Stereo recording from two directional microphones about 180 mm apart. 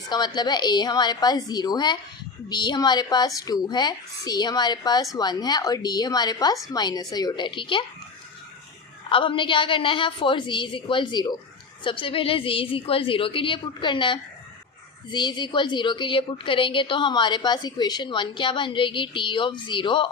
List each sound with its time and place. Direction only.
0.1 s a woman's voice: 25° left (ahead or behind)
9.0 s a woman's voice: 30° left (ahead or behind)